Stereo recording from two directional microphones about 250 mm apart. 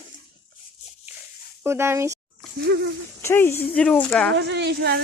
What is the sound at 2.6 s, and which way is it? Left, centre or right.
Speech, right.